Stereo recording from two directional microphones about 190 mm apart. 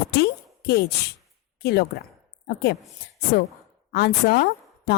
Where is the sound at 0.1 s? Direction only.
55° left (ahead or behind).